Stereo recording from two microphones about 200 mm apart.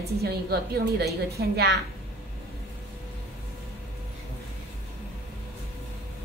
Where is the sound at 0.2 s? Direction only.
55° right (ahead or behind).